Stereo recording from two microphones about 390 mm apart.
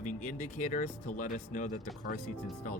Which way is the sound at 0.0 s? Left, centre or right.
Centre.